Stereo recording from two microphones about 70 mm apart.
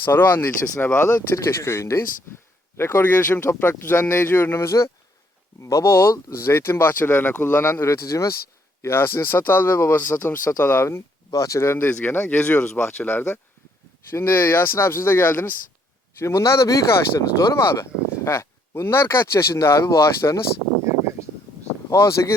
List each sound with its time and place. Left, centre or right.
0.0 s speech: left
11.3 s speech: left
12.0 s speech: left
16.1 s speech: left
21.8 s speech: left